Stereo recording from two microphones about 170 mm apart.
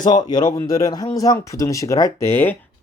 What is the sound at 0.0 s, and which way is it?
Speech, 25° left (ahead or behind).